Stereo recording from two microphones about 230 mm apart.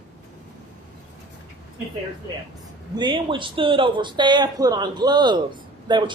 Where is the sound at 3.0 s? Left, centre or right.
Right.